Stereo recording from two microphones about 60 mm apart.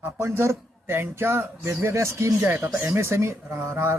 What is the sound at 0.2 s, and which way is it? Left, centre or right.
Speech, right.